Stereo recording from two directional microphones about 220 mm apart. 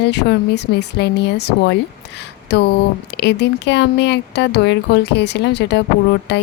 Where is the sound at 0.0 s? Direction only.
50° left (ahead or behind).